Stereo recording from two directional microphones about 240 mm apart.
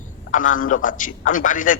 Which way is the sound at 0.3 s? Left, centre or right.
Left.